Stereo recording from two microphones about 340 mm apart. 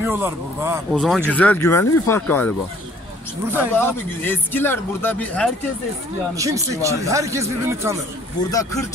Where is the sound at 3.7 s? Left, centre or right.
Centre.